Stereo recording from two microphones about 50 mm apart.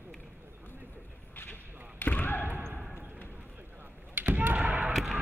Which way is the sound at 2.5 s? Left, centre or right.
Right.